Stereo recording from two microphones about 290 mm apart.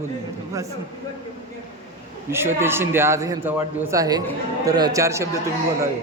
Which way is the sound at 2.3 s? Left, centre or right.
Centre.